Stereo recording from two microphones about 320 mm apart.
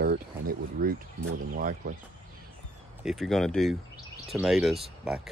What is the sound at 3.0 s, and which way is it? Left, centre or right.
Speech, centre.